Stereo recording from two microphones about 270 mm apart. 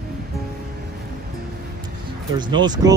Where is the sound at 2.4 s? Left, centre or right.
Centre.